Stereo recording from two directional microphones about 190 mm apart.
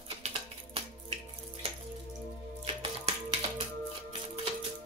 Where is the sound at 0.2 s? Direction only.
30° right (ahead or behind).